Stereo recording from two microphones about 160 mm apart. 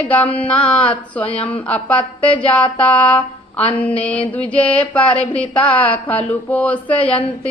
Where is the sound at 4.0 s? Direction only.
5° left (ahead or behind).